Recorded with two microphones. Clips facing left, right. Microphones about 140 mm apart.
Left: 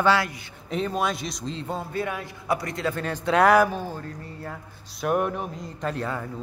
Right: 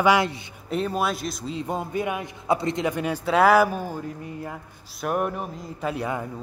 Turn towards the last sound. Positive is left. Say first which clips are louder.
# right 1 dB
turn(degrees=-15)  # may be behind; listen again after turning